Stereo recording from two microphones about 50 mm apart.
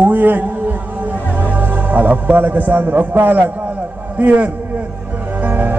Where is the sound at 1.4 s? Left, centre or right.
Right.